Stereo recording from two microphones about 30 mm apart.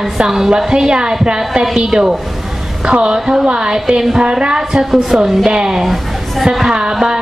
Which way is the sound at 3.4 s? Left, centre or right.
Right.